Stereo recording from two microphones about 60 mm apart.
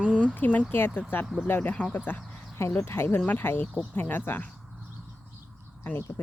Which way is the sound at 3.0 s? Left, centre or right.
Left.